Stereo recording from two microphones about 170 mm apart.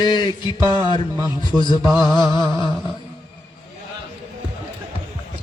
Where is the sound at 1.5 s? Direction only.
10° left (ahead or behind).